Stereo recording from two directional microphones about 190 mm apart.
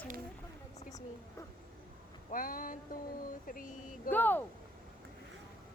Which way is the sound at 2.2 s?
45° left (ahead or behind).